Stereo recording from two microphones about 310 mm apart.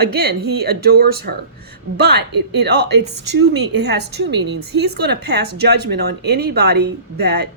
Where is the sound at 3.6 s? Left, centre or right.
Right.